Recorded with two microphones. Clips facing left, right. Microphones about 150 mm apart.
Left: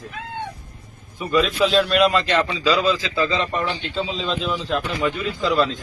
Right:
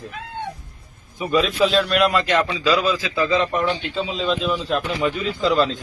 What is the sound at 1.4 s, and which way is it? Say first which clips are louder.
A man's voice: left 1 dB; centre (ahead or behind).